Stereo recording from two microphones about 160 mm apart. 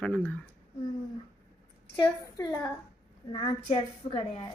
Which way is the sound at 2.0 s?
25° left (ahead or behind).